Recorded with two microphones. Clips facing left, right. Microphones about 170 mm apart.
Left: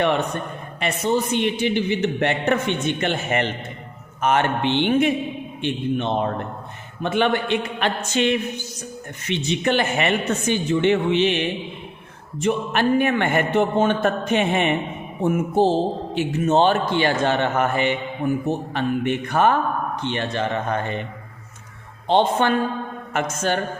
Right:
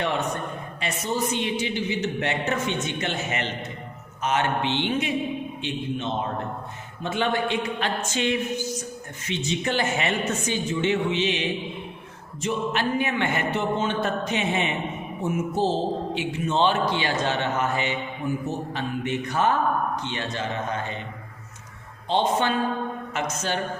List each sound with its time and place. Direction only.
0.8 s speech: 60° left (ahead or behind)
22.0 s speech: 60° left (ahead or behind)